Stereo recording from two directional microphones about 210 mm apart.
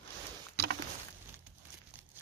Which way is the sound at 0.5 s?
50° right (ahead or behind).